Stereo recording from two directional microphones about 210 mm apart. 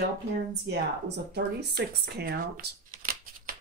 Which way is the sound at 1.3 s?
50° right (ahead or behind).